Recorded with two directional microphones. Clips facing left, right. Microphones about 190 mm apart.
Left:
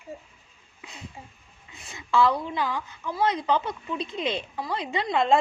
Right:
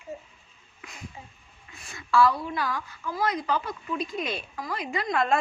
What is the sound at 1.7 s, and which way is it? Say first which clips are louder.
A woman's voice: even; 20° left (ahead or behind).